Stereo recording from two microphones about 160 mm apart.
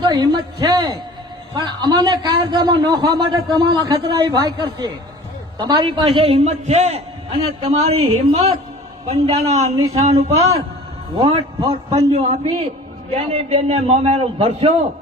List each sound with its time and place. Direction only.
0.0 s a woman's voice: 25° right (ahead or behind)